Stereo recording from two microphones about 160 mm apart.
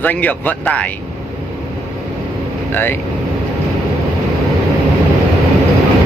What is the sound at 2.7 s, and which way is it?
Speech, 10° left (ahead or behind).